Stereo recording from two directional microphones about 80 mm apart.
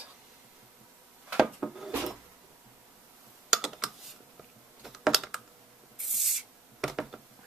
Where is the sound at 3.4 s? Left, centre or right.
Centre.